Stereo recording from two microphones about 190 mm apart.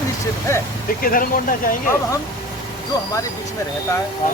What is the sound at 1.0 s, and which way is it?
Speech, 45° left (ahead or behind).